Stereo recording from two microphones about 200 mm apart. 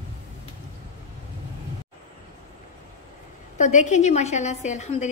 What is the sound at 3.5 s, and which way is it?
A woman's voice, 35° left (ahead or behind).